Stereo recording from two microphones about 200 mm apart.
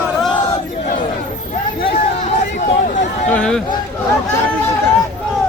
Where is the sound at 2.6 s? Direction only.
40° left (ahead or behind).